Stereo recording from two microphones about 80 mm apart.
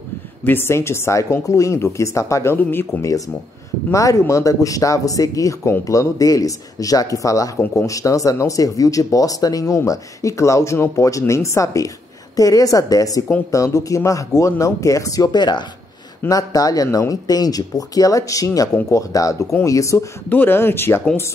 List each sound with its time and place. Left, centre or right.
0.5 s speech: left
2.5 s speech: left
3.9 s speech: left
16.3 s speech: left
20.2 s speech: left